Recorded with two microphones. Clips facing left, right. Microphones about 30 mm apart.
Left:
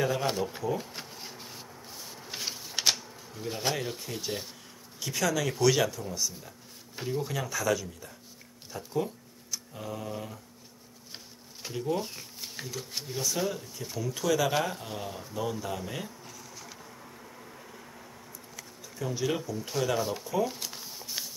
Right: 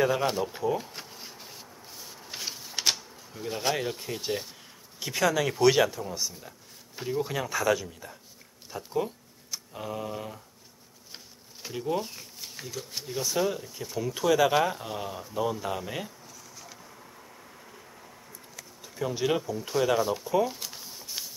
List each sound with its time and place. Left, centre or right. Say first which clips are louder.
0.0 s speech: right 4 dB; centre
0.3 s a sound: right 2 dB; centre
3.7 s speech: right 3 dB; centre
5.0 s speech: right 3 dB; centre
11.7 s speech: right 1 dB; centre
12.0 s shuffling cards: even; centre
12.6 s speech: right 2 dB; centre
13.2 s speech: right 3 dB; centre
14.5 s speech: right 4 dB; centre
16.5 s a sound: left 1 dB; centre
18.9 s speech: right 3 dB; centre
20.4 s a sound: right 1 dB; centre